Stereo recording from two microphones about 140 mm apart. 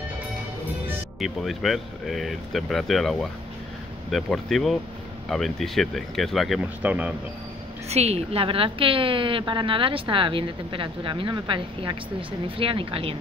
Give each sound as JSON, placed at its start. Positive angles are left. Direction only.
{"t": 1.2, "sound": "speech", "side_deg": 0}
{"t": 6.8, "sound": "speech", "side_deg": -10}
{"t": 7.9, "sound": "a woman's voice", "side_deg": -50}